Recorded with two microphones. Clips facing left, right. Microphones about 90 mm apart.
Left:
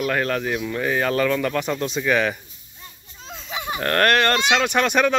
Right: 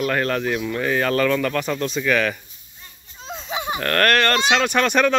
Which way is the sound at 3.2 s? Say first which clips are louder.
Right 3 dB; 25° right (ahead or behind).